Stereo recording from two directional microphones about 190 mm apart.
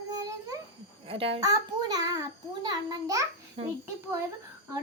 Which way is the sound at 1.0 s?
30° right (ahead or behind).